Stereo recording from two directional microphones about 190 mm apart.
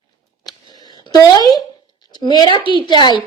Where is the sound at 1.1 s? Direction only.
20° left (ahead or behind).